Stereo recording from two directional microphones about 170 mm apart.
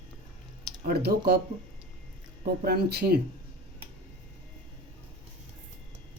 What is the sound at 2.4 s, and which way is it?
Speech, 70° right (ahead or behind).